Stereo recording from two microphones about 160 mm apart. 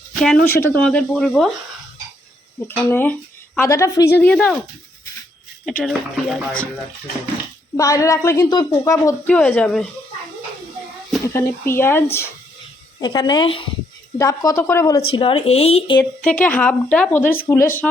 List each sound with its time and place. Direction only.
0.1 s a sound: 5° left (ahead or behind)
0.4 s speech: 15° left (ahead or behind)
2.6 s speech: 15° left (ahead or behind)
5.8 s speech: centre (ahead or behind)
7.8 s a woman's voice: 20° left (ahead or behind)
9.2 s speech: 10° left (ahead or behind)
11.3 s speech: 15° left (ahead or behind)
13.0 s a woman's voice: 25° left (ahead or behind)
14.2 s a woman's voice: 20° left (ahead or behind)
15.1 s speech: 35° left (ahead or behind)
16.2 s speech: 10° left (ahead or behind)